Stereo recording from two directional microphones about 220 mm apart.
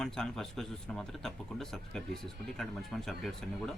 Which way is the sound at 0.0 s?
Centre (ahead or behind).